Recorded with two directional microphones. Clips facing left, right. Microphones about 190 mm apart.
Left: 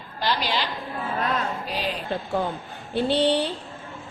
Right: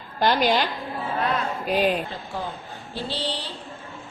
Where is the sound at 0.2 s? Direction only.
50° right (ahead or behind).